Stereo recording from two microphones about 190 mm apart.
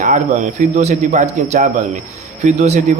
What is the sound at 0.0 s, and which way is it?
Speech, 40° right (ahead or behind).